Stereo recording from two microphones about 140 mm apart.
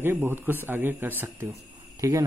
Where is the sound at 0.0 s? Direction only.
15° right (ahead or behind).